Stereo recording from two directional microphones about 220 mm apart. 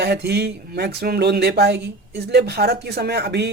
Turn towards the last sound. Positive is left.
turn(degrees=-50)  # may be behind; listen again after turning